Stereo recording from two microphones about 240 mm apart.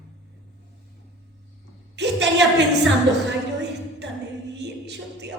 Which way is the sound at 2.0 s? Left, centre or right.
Right.